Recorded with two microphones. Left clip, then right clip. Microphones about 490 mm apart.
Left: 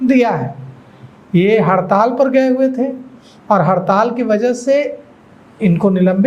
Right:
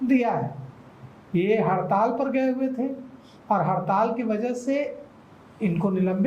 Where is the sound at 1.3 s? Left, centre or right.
Left.